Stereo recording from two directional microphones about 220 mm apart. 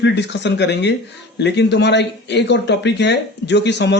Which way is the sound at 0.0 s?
50° left (ahead or behind).